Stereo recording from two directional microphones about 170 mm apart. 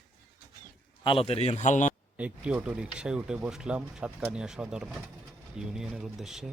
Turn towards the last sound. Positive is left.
turn(degrees=-5)  # may be behind; listen again after turning